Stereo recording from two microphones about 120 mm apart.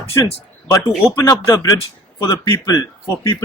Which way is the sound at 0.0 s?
25° left (ahead or behind).